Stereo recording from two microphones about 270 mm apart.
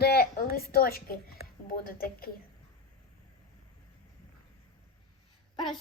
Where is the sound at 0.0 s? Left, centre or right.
Left.